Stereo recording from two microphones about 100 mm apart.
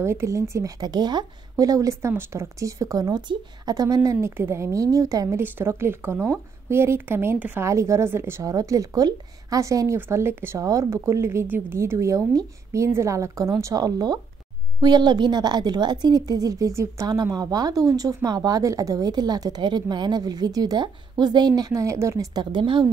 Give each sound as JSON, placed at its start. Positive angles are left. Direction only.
{"t": 0.0, "sound": "a woman's voice", "side_deg": -25}
{"t": 5.4, "sound": "a woman's voice", "side_deg": -25}
{"t": 22.3, "sound": "speech", "side_deg": -50}